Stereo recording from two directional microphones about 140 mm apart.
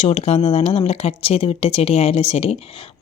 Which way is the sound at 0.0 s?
45° left (ahead or behind).